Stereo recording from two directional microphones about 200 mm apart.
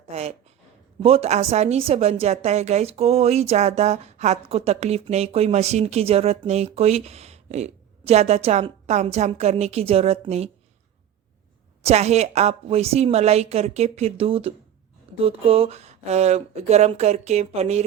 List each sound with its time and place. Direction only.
0.1 s a woman's voice: 30° right (ahead or behind)
11.8 s a woman's voice: 30° right (ahead or behind)